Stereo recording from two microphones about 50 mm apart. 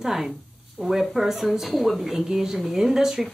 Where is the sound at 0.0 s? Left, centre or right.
Centre.